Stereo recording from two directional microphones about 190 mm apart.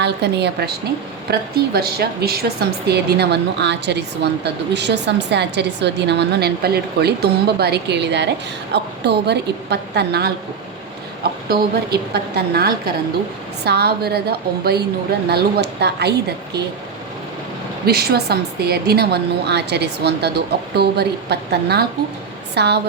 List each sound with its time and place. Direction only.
0.0 s a woman's voice: 60° right (ahead or behind)
17.8 s a woman's voice: 55° right (ahead or behind)